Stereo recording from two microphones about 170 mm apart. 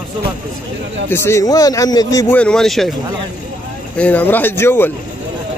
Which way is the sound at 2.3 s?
5° left (ahead or behind).